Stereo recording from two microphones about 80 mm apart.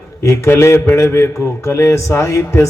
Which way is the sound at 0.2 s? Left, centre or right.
Left.